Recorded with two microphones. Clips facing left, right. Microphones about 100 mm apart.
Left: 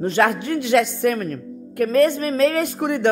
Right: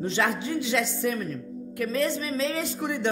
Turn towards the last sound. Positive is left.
turn(degrees=55)  # may be behind; listen again after turning